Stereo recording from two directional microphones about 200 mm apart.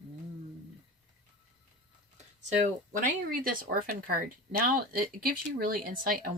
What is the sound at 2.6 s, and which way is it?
Speech, 40° right (ahead or behind).